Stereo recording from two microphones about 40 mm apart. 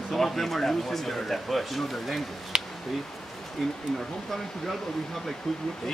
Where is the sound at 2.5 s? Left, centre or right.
Centre.